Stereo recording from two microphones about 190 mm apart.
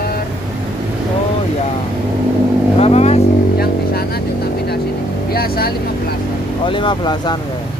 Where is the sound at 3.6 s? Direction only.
55° left (ahead or behind).